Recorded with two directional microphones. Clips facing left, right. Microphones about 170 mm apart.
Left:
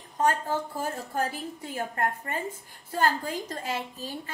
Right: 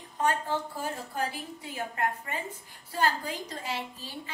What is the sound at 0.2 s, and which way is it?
A woman's voice, 45° left (ahead or behind).